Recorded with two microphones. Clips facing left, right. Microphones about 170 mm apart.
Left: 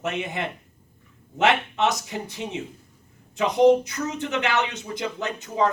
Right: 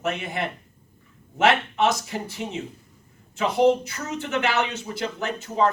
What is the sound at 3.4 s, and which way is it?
Speech, 15° left (ahead or behind).